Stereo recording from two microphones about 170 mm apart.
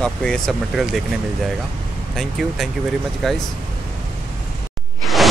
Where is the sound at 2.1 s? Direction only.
Centre (ahead or behind).